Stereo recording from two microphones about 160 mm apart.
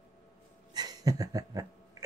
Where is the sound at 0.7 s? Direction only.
25° right (ahead or behind).